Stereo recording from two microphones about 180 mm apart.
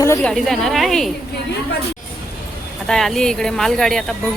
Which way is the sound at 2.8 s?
Centre (ahead or behind).